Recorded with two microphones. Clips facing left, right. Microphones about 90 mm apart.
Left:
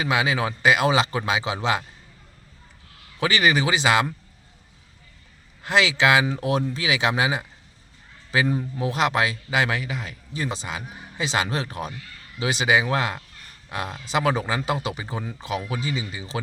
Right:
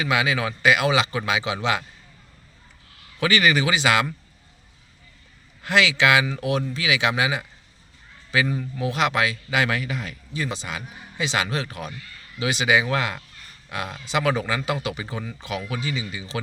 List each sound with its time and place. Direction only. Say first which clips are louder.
0.0 s a man's voice: even; 30° left (ahead or behind)
3.2 s speech: even; 25° left (ahead or behind)
5.6 s a man's voice: even; 30° left (ahead or behind)
10.3 s a man's voice: even; 35° left (ahead or behind)